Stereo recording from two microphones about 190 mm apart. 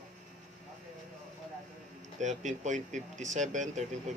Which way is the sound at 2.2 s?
40° right (ahead or behind).